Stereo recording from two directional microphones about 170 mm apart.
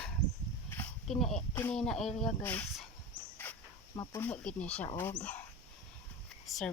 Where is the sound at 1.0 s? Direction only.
Centre (ahead or behind).